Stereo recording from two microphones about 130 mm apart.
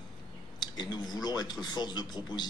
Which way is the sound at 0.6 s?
35° left (ahead or behind).